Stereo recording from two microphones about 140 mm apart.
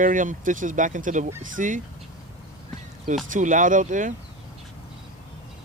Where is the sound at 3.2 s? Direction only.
70° right (ahead or behind).